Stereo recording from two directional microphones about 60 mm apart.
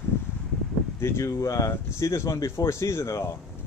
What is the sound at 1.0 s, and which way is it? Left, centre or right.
Speech, left.